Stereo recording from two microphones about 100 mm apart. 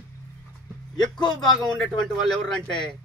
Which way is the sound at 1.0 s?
45° left (ahead or behind).